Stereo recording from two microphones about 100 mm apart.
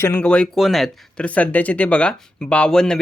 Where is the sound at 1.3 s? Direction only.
15° left (ahead or behind).